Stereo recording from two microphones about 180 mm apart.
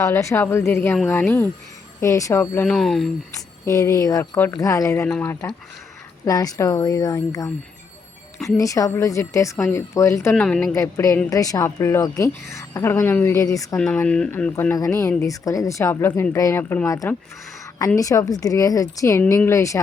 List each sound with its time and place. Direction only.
0.0 s a woman's voice: 15° left (ahead or behind)
2.6 s speech: centre (ahead or behind)
3.7 s a woman's voice: 20° left (ahead or behind)
10.4 s speech: 5° left (ahead or behind)
10.8 s a woman's voice: 15° left (ahead or behind)
13.7 s a woman's voice: 5° left (ahead or behind)